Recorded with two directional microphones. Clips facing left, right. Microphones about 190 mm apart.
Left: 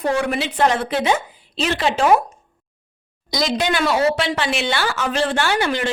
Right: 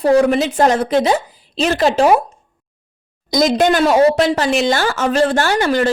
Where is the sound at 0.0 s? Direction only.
35° right (ahead or behind).